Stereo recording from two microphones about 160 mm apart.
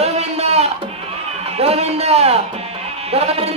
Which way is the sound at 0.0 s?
40° right (ahead or behind).